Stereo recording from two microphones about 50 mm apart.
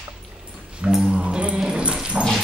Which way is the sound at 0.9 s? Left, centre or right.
Centre.